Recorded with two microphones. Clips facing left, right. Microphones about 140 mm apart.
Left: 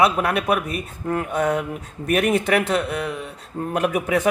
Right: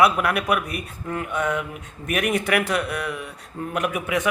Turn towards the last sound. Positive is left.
turn(degrees=35)  # may be behind; listen again after turning